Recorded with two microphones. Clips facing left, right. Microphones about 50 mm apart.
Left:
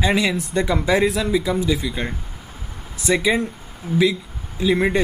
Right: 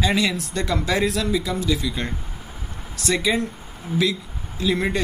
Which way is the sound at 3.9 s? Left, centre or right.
Centre.